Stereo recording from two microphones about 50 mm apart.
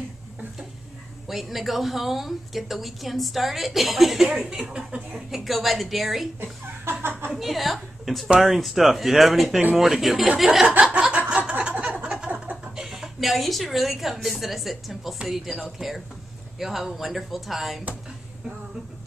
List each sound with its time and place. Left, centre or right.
1.2 s a woman's voice: centre
5.4 s a woman's voice: centre
6.8 s a sound: right
7.3 s a woman's voice: centre
10.7 s chuckle: right
11.6 s a sound: centre
12.7 s a woman's voice: centre